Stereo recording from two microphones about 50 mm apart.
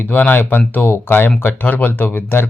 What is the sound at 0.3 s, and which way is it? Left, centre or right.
Speech, left.